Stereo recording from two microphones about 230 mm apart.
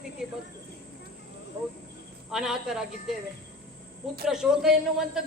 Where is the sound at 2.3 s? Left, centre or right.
Centre.